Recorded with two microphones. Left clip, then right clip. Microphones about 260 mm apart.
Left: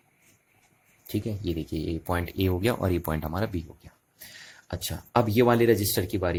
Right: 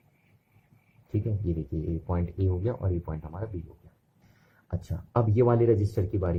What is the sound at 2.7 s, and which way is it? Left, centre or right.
Speech, left.